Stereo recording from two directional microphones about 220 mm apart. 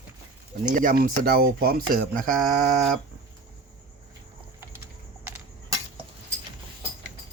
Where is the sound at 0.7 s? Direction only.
35° right (ahead or behind).